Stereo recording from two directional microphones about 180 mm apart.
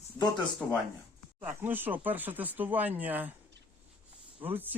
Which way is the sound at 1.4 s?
10° right (ahead or behind).